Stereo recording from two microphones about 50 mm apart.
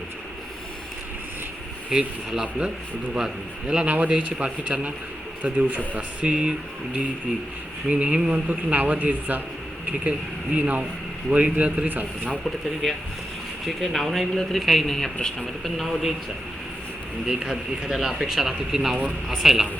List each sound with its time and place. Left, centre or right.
1.9 s speech: centre
3.8 s speech: right
7.9 s speech: right
11.9 s speech: right
13.7 s a man's voice: centre
17.2 s speech: centre